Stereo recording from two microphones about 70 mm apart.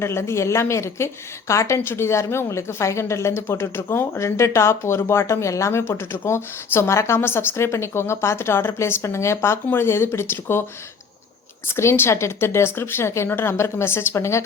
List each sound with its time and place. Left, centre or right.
0.0 s a woman's voice: left
11.8 s speech: left